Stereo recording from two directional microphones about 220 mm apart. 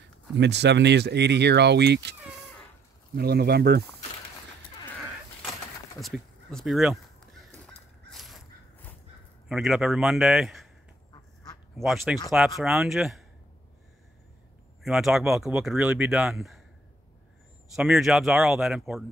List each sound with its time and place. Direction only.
0.4 s speech: 50° right (ahead or behind)
3.2 s speech: 45° right (ahead or behind)
5.9 s speech: centre (ahead or behind)
7.5 s crow: centre (ahead or behind)
9.5 s speech: centre (ahead or behind)
11.8 s speech: centre (ahead or behind)
14.8 s speech: centre (ahead or behind)
17.7 s speech: centre (ahead or behind)